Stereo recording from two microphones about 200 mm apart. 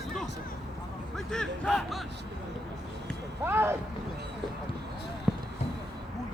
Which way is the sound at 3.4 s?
10° right (ahead or behind).